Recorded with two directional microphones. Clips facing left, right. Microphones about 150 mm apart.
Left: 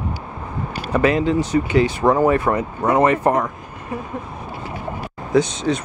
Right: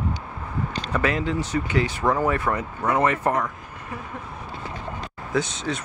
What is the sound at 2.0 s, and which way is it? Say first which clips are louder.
Speech: left 6 dB; 30° left (ahead or behind).